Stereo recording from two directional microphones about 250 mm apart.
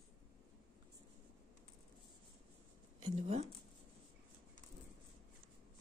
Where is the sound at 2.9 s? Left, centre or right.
Right.